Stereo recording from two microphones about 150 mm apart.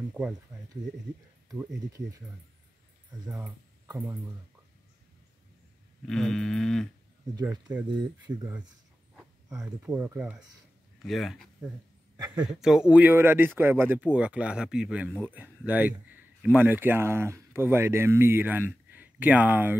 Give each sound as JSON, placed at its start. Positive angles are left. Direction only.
{"t": 1.9, "sound": "speech", "side_deg": -20}
{"t": 3.3, "sound": "speech", "side_deg": -20}
{"t": 6.0, "sound": "a sound", "side_deg": 5}
{"t": 9.1, "sound": "speech", "side_deg": -5}
{"t": 11.0, "sound": "a sound", "side_deg": 0}
{"t": 12.4, "sound": "speech", "side_deg": -5}